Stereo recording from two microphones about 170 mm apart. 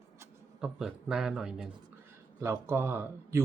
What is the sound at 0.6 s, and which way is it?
A man's voice, 5° right (ahead or behind).